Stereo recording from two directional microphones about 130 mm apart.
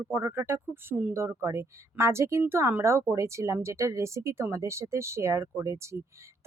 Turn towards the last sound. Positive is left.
turn(degrees=-20)  # may be behind; listen again after turning